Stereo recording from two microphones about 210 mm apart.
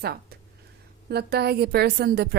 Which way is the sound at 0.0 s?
50° right (ahead or behind).